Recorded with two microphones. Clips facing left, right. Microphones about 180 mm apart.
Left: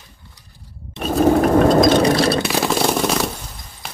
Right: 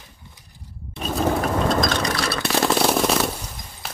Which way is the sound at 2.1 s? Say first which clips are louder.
Left 9 dB; 25° left (ahead or behind).